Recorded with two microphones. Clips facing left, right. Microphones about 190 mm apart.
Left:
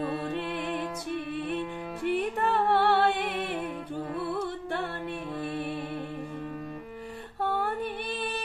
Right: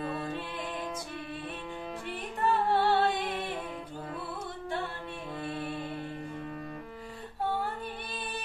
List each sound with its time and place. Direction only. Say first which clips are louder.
2.1 s music: left 1 dB; 65° left (ahead or behind)